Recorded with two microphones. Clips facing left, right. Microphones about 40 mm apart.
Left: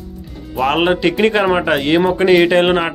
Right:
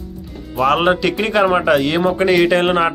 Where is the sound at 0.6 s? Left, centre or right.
Centre.